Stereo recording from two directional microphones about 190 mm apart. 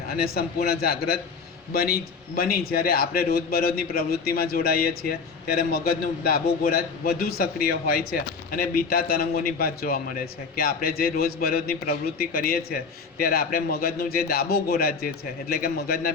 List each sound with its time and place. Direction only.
0.1 s a man's voice: 55° left (ahead or behind)